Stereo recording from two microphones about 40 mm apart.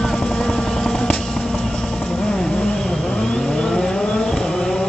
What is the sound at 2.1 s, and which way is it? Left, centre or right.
Vehicle, centre.